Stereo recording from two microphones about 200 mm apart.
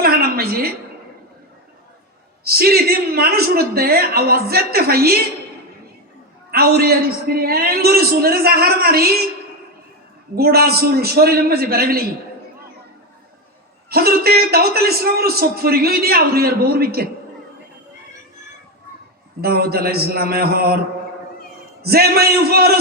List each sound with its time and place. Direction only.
0.0 s a sound: 50° right (ahead or behind)
2.4 s a man's voice: 50° right (ahead or behind)
6.5 s a man's voice: 50° right (ahead or behind)
10.3 s a man's voice: 50° right (ahead or behind)
13.9 s a man's voice: 50° right (ahead or behind)
19.4 s a man's voice: 50° right (ahead or behind)
21.8 s a man's voice: 50° right (ahead or behind)